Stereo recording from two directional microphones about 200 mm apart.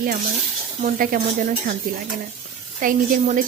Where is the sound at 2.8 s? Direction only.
40° right (ahead or behind).